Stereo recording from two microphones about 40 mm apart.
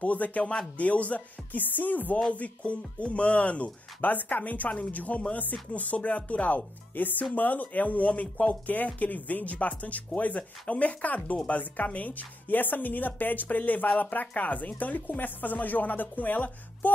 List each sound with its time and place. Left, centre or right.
0.0 s speech: left
1.6 s a woman's voice: left
2.3 s speech: left
4.0 s a woman's voice: left